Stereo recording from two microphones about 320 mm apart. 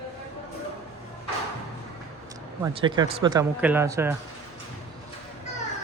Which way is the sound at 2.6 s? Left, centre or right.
Centre.